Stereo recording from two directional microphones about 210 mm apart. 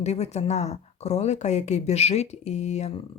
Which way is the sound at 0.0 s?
30° left (ahead or behind).